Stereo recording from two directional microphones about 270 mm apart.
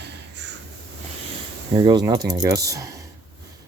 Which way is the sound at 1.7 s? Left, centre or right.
Centre.